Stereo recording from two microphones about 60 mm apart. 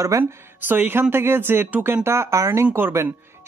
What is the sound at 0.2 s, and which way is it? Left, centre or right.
Speech, right.